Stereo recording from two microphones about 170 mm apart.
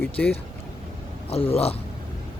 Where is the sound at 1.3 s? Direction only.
35° left (ahead or behind).